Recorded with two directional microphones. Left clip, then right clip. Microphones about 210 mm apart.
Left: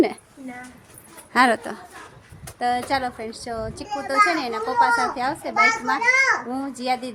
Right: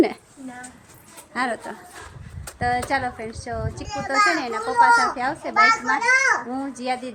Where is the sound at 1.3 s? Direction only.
55° left (ahead or behind).